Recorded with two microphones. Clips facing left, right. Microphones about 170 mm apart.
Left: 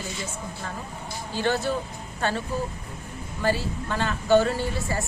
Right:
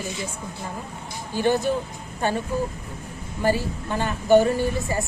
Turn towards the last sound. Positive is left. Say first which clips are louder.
# right 4 dB
turn(degrees=-15)  # may be behind; listen again after turning